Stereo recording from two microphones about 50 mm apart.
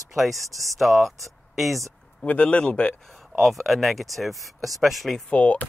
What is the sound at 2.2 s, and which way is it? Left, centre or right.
Speech, left.